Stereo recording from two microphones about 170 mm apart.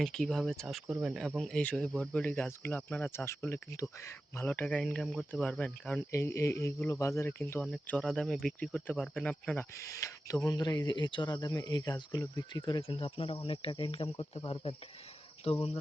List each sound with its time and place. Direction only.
0.0 s speech: 5° left (ahead or behind)
9.7 s speech: 20° left (ahead or behind); by 14.8 s 35° left (ahead or behind)
15.4 s cricket: 40° left (ahead or behind)